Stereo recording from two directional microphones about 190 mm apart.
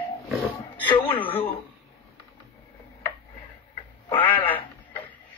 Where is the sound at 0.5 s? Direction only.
25° left (ahead or behind).